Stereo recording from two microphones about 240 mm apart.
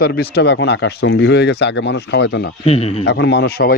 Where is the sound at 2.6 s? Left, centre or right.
Left.